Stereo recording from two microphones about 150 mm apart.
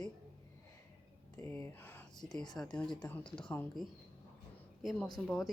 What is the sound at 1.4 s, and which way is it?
Speech, 15° left (ahead or behind).